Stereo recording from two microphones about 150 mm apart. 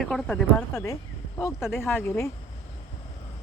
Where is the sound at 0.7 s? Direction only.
20° left (ahead or behind).